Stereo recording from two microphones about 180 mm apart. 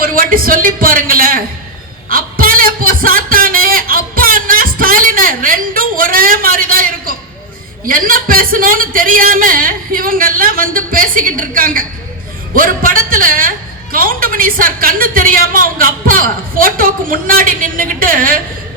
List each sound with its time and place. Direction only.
0.0 s a woman's voice: 50° right (ahead or behind)
2.0 s a sound: 50° right (ahead or behind)
7.9 s a woman's voice: 50° right (ahead or behind)